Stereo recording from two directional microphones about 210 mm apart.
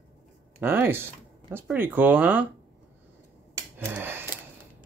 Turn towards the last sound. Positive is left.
turn(degrees=-10)  # may be behind; listen again after turning